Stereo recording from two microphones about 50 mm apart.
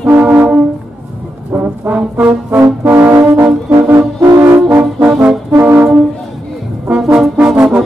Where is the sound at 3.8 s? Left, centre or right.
Right.